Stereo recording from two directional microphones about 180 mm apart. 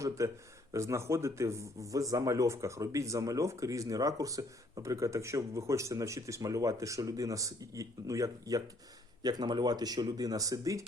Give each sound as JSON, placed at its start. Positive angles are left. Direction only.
{"t": 0.2, "sound": "speech", "side_deg": -15}